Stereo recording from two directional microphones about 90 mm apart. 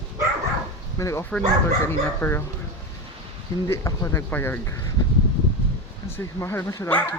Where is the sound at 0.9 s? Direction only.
35° left (ahead or behind).